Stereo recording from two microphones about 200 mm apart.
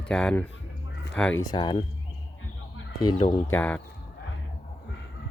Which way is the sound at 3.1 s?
25° left (ahead or behind).